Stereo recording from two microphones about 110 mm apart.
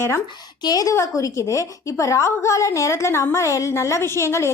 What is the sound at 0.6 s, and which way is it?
A woman's voice, 35° left (ahead or behind).